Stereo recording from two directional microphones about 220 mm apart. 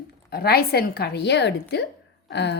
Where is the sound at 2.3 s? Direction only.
50° left (ahead or behind).